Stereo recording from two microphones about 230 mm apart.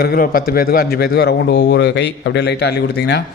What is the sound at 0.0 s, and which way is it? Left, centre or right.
A man's voice, left.